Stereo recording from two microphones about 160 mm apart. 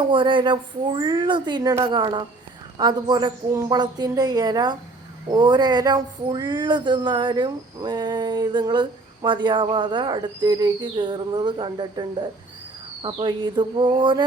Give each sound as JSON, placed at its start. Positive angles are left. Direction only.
{"t": 0.1, "sound": "speech", "side_deg": -30}